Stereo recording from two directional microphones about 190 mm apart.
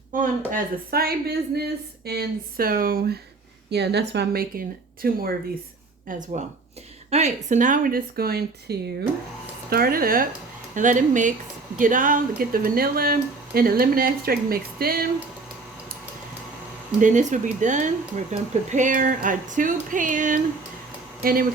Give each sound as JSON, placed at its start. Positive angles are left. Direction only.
{"t": 0.1, "sound": "a woman's voice", "side_deg": -45}
{"t": 6.1, "sound": "speech", "side_deg": -45}
{"t": 17.0, "sound": "speech", "side_deg": -40}